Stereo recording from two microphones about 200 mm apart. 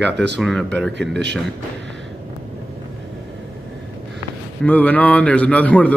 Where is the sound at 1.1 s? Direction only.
60° right (ahead or behind).